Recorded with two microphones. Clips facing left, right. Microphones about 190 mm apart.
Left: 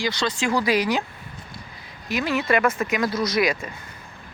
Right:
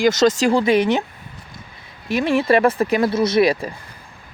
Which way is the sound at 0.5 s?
25° right (ahead or behind).